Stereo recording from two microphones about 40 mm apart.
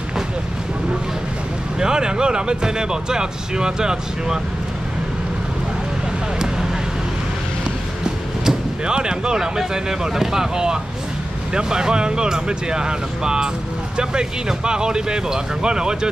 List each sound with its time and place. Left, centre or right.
1.8 s speech: centre
8.0 s music: centre
9.6 s speech: centre
14.6 s speech: right